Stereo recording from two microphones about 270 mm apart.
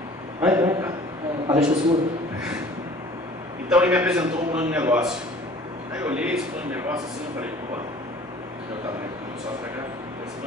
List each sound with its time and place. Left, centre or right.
0.4 s a man's voice: centre
3.6 s a man's voice: centre